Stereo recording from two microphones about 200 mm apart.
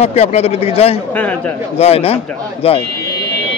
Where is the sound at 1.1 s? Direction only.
5° left (ahead or behind).